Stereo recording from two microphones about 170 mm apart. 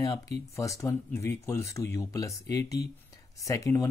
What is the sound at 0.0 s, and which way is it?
Speech, 20° left (ahead or behind).